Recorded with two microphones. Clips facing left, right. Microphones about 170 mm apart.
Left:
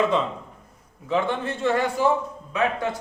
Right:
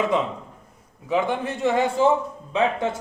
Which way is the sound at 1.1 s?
15° right (ahead or behind).